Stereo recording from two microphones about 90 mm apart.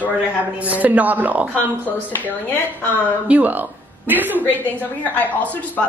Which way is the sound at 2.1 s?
25° left (ahead or behind).